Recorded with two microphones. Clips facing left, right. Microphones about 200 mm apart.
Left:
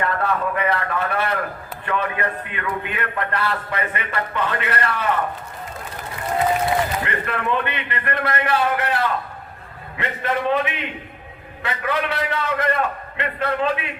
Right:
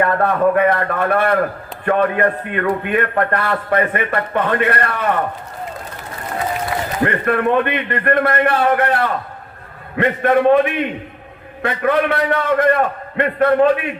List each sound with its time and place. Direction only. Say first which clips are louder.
0.0 s a man's voice: right 7 dB; 50° right (ahead or behind)
7.0 s a man's voice: right 9 dB; 50° right (ahead or behind)